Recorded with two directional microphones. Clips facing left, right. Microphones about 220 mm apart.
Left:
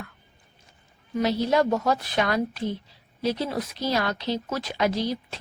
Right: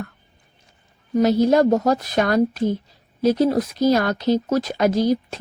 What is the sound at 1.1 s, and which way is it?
A woman's voice, 45° right (ahead or behind).